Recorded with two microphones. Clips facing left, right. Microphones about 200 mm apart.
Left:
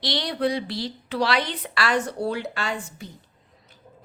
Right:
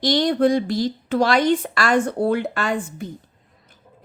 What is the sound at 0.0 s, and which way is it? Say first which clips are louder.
A woman's voice: right 8 dB; 45° right (ahead or behind).